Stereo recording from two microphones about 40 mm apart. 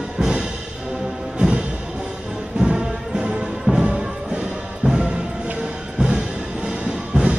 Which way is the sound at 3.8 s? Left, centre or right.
Right.